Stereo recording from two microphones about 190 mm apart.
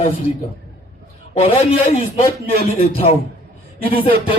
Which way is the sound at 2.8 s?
30° left (ahead or behind).